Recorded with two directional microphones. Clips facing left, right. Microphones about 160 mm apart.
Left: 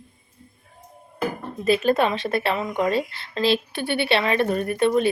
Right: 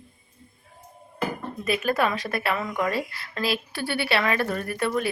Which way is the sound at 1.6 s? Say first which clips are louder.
Left 5 dB; 25° left (ahead or behind).